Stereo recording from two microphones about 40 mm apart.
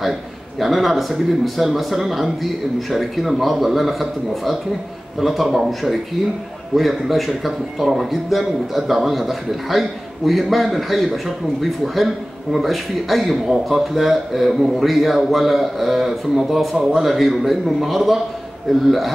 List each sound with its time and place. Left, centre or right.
0.6 s speech: centre